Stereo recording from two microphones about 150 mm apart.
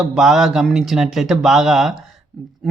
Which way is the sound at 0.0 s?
Centre (ahead or behind).